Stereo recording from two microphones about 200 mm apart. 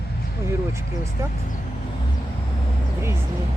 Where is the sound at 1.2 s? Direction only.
15° right (ahead or behind).